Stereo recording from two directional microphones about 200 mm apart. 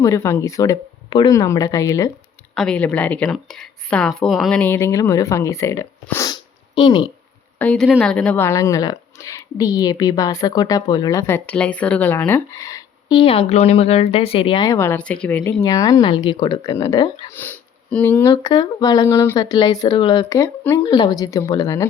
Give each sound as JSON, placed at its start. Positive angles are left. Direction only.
{"t": 0.0, "sound": "speech", "side_deg": 15}
{"t": 2.6, "sound": "speech", "side_deg": 5}
{"t": 7.6, "sound": "speech", "side_deg": 5}